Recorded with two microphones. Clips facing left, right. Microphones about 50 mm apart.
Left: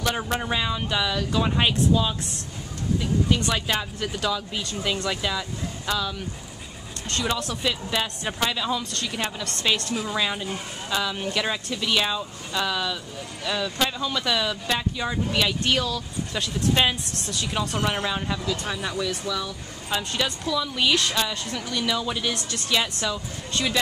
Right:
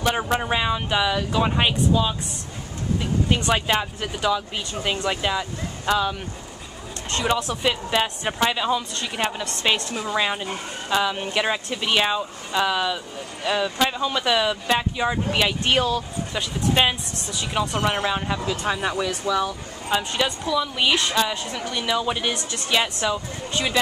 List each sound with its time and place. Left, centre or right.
0.0 s a woman's voice: centre
3.3 s speech: right
16.3 s a woman's voice: centre
18.7 s speech: right
19.9 s a woman's voice: centre